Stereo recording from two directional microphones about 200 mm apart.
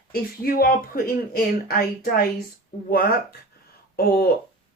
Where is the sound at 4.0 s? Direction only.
50° left (ahead or behind).